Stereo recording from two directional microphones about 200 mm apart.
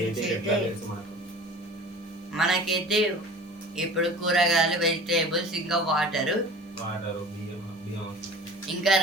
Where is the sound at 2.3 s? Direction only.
Centre (ahead or behind).